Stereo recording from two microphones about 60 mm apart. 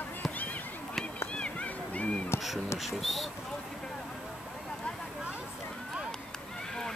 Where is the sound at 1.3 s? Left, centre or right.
Centre.